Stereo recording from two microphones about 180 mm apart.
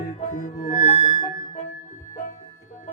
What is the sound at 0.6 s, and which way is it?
Music, 35° left (ahead or behind).